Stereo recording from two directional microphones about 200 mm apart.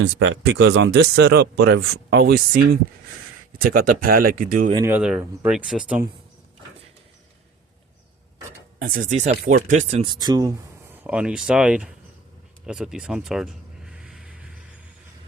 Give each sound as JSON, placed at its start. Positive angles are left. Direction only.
{"t": 0.0, "sound": "speech", "side_deg": -65}
{"t": 4.9, "sound": "speech", "side_deg": -5}
{"t": 8.8, "sound": "speech", "side_deg": -40}
{"t": 9.3, "sound": "speech", "side_deg": -50}
{"t": 11.0, "sound": "speech", "side_deg": -5}
{"t": 12.6, "sound": "a sound", "side_deg": -5}